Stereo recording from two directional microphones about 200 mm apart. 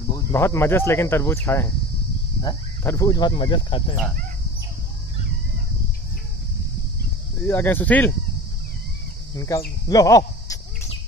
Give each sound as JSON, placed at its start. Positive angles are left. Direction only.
{"t": 0.1, "sound": "speech", "side_deg": 15}
{"t": 7.4, "sound": "speech", "side_deg": 10}
{"t": 9.3, "sound": "speech", "side_deg": 15}